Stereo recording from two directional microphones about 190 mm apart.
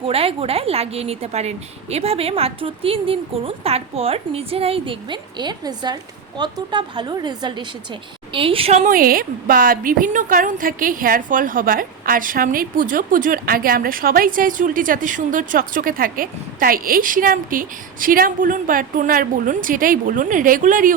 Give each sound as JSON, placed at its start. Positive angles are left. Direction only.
{"t": 0.0, "sound": "a woman's voice", "side_deg": -30}